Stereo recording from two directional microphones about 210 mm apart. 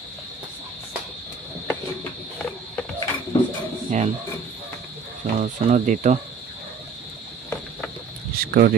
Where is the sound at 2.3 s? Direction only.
5° left (ahead or behind).